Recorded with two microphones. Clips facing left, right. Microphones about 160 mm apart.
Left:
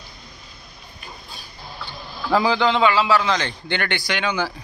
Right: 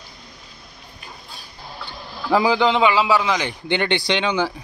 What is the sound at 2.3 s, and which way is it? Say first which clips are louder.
A man's voice: right 1 dB; 15° right (ahead or behind).